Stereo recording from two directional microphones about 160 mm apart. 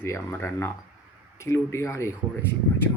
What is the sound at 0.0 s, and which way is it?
Speech, 15° left (ahead or behind).